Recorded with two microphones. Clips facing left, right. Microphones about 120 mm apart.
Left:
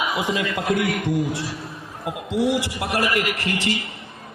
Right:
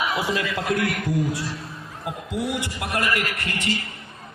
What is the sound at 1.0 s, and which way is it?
A man's voice, 25° left (ahead or behind).